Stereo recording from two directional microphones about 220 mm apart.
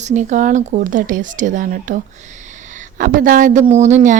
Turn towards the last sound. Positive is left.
turn(degrees=-30)  # may be behind; listen again after turning